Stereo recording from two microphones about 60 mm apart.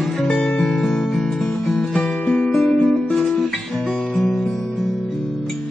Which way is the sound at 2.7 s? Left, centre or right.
Centre.